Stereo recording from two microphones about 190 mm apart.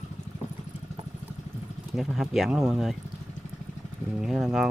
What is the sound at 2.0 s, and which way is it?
Speech, centre (ahead or behind).